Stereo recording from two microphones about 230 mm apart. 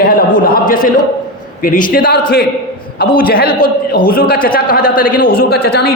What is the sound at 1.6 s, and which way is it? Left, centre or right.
Speech, left.